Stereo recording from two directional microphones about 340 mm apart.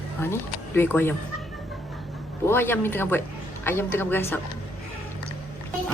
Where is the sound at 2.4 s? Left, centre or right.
Centre.